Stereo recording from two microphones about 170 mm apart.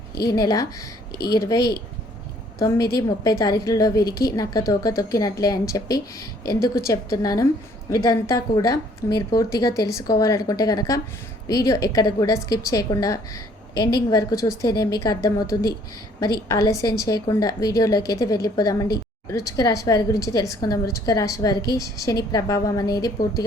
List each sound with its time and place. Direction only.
0.3 s a woman's voice: 20° left (ahead or behind)